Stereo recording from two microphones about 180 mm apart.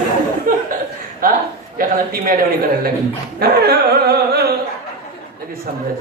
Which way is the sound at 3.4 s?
60° right (ahead or behind).